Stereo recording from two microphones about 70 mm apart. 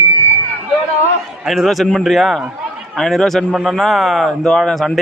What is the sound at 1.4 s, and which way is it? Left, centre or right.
Speech, centre.